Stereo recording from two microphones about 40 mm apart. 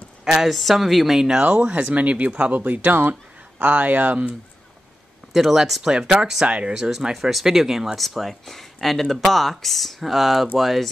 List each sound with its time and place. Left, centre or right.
0.2 s a sound: centre
0.5 s speech: centre
1.1 s speech: centre
1.4 s speech: right
2.5 s speech: right
5.3 s speech: centre
6.4 s speech: right
6.7 s speech: centre
8.0 s speech: centre